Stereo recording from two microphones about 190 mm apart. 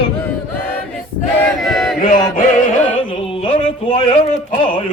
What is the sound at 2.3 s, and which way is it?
Music, 45° left (ahead or behind).